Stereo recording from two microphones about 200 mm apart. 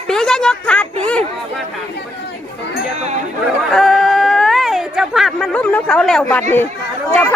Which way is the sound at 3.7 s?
Centre (ahead or behind).